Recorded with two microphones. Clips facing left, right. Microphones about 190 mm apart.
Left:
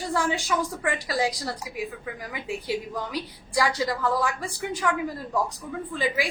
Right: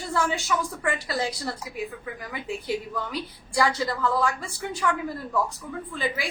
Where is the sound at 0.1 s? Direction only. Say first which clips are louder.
Even; 15° left (ahead or behind).